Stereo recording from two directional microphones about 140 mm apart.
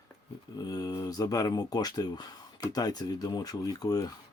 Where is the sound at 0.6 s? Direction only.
30° left (ahead or behind).